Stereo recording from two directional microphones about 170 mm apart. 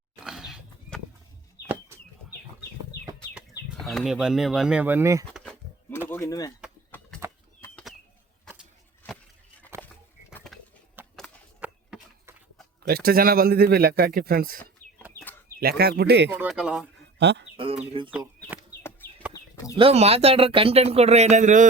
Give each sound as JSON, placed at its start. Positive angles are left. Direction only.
{"t": 0.3, "sound": "horse", "side_deg": -5}
{"t": 3.8, "sound": "speech", "side_deg": 0}
{"t": 5.2, "sound": "goat", "side_deg": 5}
{"t": 6.1, "sound": "speech", "side_deg": 15}
{"t": 7.6, "sound": "bird flight", "side_deg": 5}
{"t": 10.3, "sound": "a sound", "side_deg": 5}
{"t": 11.0, "sound": "a sound", "side_deg": -10}
{"t": 12.9, "sound": "a man's voice", "side_deg": -60}
{"t": 15.6, "sound": "speech", "side_deg": -70}
{"t": 16.3, "sound": "speech", "side_deg": -5}
{"t": 17.2, "sound": "speech", "side_deg": -90}
{"t": 18.0, "sound": "speech", "side_deg": -35}
{"t": 18.8, "sound": "a sound", "side_deg": 15}
{"t": 19.7, "sound": "speech", "side_deg": -35}